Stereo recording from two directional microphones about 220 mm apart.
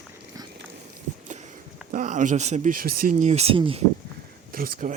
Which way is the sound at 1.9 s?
35° right (ahead or behind).